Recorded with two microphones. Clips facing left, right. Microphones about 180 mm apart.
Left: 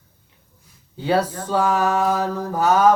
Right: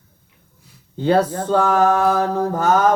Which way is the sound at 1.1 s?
55° right (ahead or behind).